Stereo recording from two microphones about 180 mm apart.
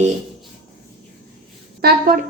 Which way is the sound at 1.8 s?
60° right (ahead or behind).